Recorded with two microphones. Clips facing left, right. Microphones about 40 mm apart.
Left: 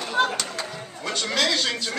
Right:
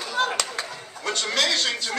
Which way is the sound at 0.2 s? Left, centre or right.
Centre.